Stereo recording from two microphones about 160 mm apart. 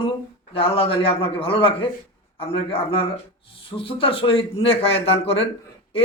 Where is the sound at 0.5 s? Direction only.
35° left (ahead or behind).